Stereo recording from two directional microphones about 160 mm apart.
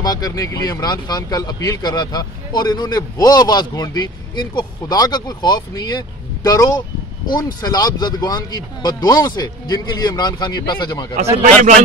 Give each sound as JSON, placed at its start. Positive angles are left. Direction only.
{"t": 0.0, "sound": "a man's voice", "side_deg": 25}